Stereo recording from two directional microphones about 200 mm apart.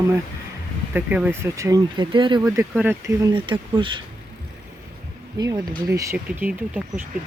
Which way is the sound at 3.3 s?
25° right (ahead or behind).